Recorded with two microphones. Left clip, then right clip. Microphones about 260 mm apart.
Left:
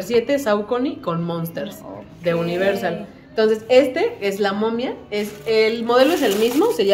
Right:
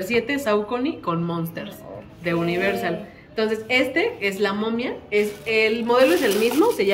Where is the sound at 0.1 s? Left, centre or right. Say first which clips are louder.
Left 4 dB; left.